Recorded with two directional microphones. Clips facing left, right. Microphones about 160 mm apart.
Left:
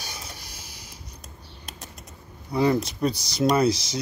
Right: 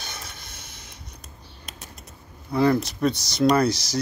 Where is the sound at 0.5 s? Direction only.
55° right (ahead or behind).